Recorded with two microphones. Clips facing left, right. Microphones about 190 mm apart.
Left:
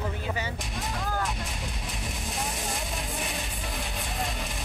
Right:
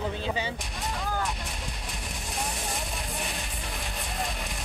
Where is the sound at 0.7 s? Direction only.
Centre (ahead or behind).